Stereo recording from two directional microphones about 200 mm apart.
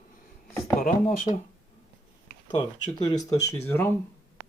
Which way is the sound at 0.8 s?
45° left (ahead or behind).